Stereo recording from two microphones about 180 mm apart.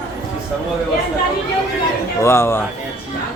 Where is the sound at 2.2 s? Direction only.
15° left (ahead or behind).